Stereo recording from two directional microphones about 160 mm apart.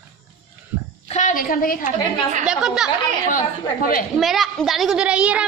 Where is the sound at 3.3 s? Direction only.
60° left (ahead or behind).